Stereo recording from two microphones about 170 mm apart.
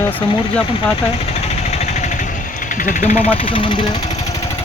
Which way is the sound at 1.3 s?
40° left (ahead or behind).